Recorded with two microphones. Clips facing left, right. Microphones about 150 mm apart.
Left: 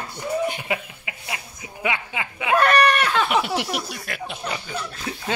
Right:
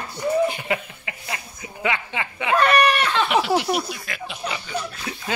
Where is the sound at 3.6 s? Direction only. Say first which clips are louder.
Right 3 dB; 55° left (ahead or behind).